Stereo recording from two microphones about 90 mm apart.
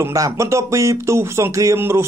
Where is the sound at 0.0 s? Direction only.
35° right (ahead or behind).